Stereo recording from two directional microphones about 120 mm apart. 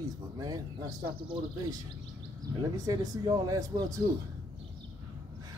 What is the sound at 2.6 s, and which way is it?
Speech, 30° right (ahead or behind).